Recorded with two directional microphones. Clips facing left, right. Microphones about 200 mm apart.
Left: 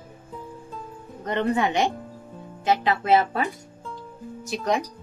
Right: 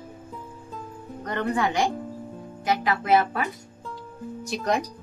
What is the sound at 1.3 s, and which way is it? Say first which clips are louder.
Speech: left 2 dB; 20° left (ahead or behind).